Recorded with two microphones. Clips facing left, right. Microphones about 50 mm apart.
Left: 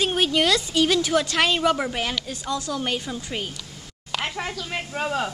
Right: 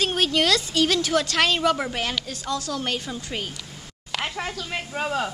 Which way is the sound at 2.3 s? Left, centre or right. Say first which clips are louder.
Left 1 dB; centre.